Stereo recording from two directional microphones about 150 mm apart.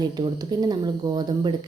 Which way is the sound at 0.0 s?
30° right (ahead or behind).